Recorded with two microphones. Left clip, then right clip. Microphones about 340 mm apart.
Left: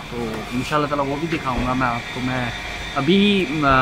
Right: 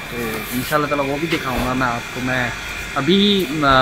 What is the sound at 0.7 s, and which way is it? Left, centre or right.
Speech, centre.